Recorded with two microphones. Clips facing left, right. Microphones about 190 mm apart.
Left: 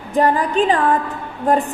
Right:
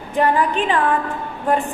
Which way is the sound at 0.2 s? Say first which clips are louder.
Left 2 dB; 40° left (ahead or behind).